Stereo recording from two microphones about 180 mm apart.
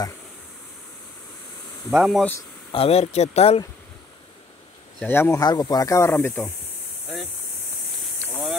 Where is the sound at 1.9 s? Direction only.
Centre (ahead or behind).